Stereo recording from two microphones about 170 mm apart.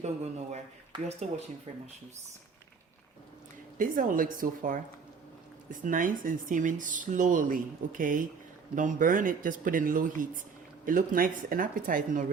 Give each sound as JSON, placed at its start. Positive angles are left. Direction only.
{"t": 0.0, "sound": "speech", "side_deg": -40}
{"t": 3.8, "sound": "speech", "side_deg": -50}